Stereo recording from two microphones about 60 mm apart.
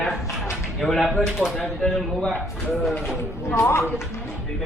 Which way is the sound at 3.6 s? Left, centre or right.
Left.